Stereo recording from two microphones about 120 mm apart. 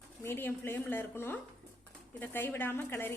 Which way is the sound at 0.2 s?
20° left (ahead or behind).